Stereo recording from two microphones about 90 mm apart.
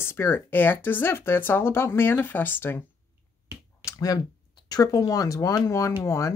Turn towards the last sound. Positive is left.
turn(degrees=35)  # may be behind; listen again after turning